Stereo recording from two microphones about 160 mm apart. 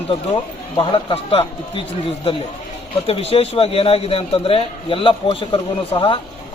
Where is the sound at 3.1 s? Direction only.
40° left (ahead or behind).